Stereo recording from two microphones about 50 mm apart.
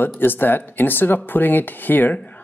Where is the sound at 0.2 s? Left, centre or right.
Left.